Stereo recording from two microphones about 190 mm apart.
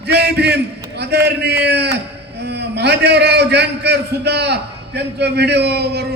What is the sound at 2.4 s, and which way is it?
A man's voice, 60° right (ahead or behind).